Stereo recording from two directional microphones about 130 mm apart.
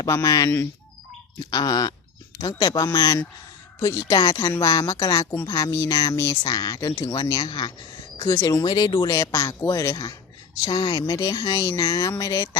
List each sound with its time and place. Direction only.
0.0 s a woman's voice: 25° left (ahead or behind)
8.3 s a woman's voice: 20° left (ahead or behind)